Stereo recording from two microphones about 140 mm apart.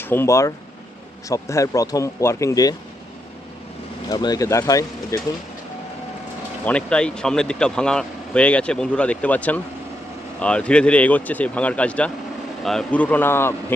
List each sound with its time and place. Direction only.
0.0 s speech: 15° left (ahead or behind)
4.1 s speech: 25° left (ahead or behind)
6.7 s speech: 10° left (ahead or behind)